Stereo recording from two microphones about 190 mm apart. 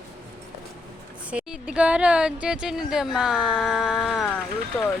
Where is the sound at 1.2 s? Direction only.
5° right (ahead or behind).